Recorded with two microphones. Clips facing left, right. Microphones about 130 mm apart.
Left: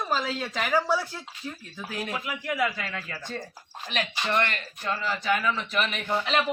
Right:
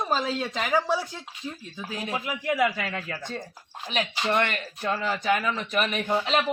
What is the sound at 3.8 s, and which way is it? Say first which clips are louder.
Speech: right 3 dB; 10° right (ahead or behind).